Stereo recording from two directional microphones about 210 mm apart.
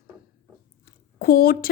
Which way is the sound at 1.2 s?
45° left (ahead or behind).